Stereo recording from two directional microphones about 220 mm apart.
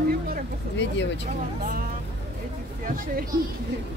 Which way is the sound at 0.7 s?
55° left (ahead or behind).